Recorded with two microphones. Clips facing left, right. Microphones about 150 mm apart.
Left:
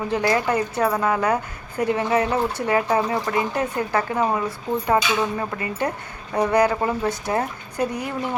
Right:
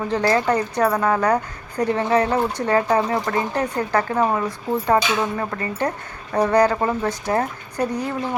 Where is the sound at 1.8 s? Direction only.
35° right (ahead or behind).